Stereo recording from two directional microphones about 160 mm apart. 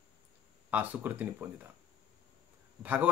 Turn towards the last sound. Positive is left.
turn(degrees=-10)  # may be behind; listen again after turning